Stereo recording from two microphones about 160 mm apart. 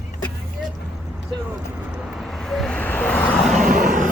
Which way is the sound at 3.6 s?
55° right (ahead or behind).